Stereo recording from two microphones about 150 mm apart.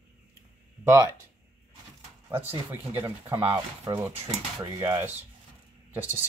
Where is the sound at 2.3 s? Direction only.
15° right (ahead or behind).